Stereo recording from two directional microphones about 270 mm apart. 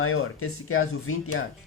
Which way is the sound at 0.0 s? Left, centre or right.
Left.